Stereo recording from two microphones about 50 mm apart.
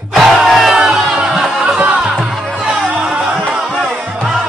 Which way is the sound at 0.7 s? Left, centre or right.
Centre.